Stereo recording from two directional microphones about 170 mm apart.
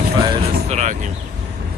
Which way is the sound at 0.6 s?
45° right (ahead or behind).